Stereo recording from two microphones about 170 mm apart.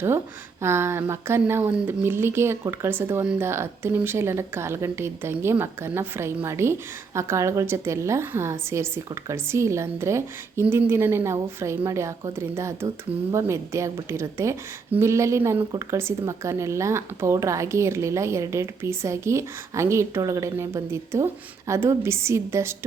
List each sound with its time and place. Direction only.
0.6 s speech: 15° right (ahead or behind)